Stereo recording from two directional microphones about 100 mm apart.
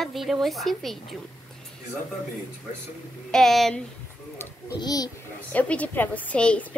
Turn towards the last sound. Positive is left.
turn(degrees=10)  # may be behind; listen again after turning